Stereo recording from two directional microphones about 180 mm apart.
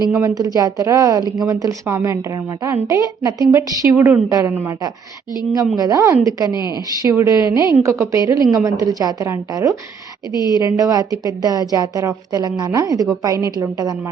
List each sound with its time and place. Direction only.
0.1 s a woman's voice: 15° right (ahead or behind)
6.5 s speech: 25° left (ahead or behind)
7.0 s a woman's voice: 20° right (ahead or behind)